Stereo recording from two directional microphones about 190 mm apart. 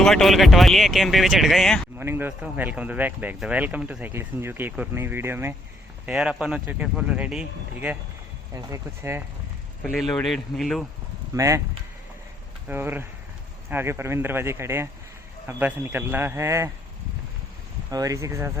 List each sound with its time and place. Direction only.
0.0 s speech: centre (ahead or behind)
2.0 s speech: 10° right (ahead or behind)
9.8 s speech: centre (ahead or behind)
11.3 s speech: 15° right (ahead or behind)
12.6 s speech: 10° right (ahead or behind)
17.9 s speech: 15° right (ahead or behind)